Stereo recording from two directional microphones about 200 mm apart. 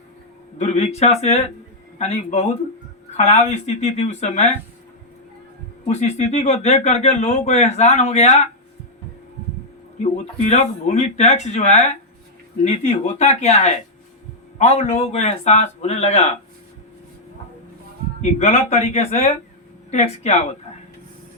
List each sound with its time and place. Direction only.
0.6 s speech: 35° left (ahead or behind)
5.9 s speech: 35° left (ahead or behind)
10.0 s speech: 35° left (ahead or behind)
18.2 s speech: 35° left (ahead or behind)